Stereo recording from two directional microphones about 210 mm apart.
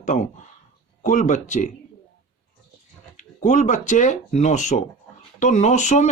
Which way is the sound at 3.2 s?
35° left (ahead or behind).